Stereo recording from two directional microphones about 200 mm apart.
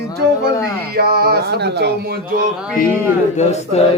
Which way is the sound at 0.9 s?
50° right (ahead or behind).